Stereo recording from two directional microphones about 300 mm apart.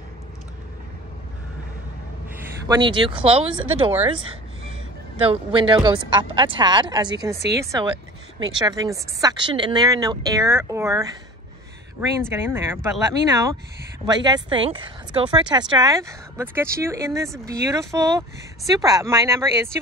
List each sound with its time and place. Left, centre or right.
2.6 s speech: centre
5.2 s speech: centre
12.2 s speech: centre